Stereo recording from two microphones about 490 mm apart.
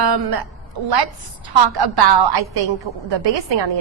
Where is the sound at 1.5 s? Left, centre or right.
Right.